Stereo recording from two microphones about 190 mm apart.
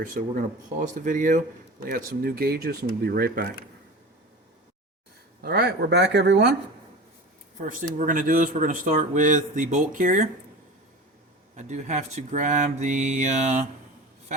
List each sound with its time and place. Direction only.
0.0 s speech: 45° right (ahead or behind)
5.4 s speech: 55° right (ahead or behind)
7.6 s speech: 45° right (ahead or behind)
11.5 s speech: 40° right (ahead or behind)